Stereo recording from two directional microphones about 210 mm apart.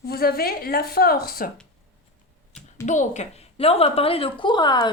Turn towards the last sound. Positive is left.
turn(degrees=20)  # may be behind; listen again after turning